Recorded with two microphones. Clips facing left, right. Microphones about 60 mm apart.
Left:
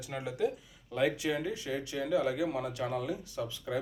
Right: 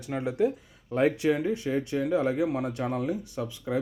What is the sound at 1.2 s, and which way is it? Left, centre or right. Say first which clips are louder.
Speech: right 7 dB; right.